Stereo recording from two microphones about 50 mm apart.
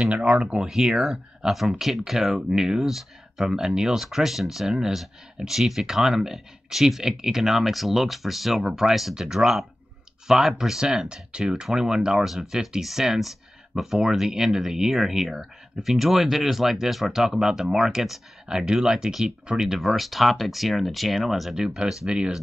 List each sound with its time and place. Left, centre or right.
0.0 s speech: right